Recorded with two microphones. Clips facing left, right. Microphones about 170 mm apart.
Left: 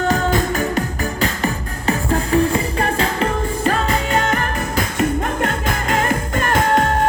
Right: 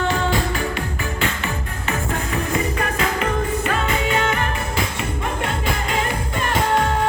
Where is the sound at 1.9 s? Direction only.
35° left (ahead or behind).